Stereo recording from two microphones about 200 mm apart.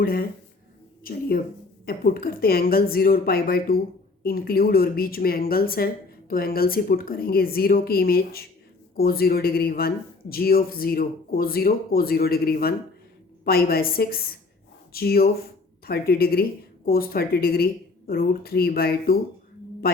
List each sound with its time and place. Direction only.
0.0 s a woman's voice: 50° left (ahead or behind)